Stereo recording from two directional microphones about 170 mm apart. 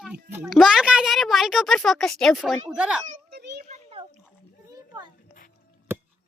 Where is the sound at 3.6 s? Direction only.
45° right (ahead or behind).